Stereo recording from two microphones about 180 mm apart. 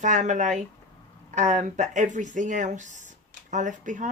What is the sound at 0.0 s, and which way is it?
Speech, 45° right (ahead or behind).